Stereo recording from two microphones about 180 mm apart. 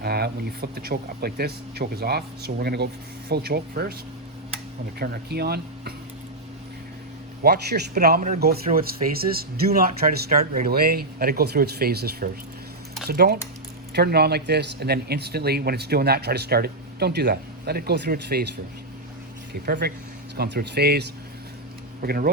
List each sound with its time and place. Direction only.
0.0 s speech: 60° right (ahead or behind)
4.9 s speech: 60° right (ahead or behind)
7.4 s speech: 60° right (ahead or behind)
19.5 s speech: 55° right (ahead or behind)